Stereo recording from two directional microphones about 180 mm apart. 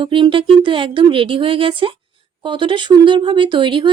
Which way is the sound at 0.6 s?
30° right (ahead or behind).